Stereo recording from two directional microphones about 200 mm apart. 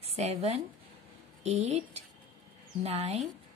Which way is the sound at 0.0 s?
30° right (ahead or behind).